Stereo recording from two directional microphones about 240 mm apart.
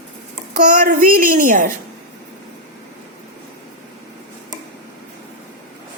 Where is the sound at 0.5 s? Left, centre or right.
Right.